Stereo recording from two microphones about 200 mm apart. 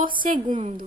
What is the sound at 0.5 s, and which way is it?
Female singing, 30° right (ahead or behind).